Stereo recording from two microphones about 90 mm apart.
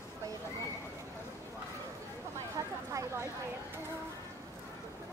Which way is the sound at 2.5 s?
35° right (ahead or behind).